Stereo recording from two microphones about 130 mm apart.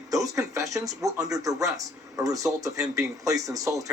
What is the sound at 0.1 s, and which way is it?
Speech, 25° right (ahead or behind).